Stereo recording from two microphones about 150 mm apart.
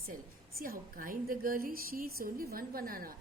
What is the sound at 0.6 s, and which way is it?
A woman's voice, 70° right (ahead or behind).